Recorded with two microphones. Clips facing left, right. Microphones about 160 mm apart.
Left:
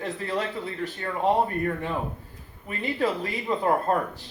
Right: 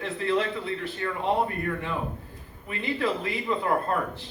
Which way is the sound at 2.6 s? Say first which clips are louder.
Left 1 dB; 40° left (ahead or behind).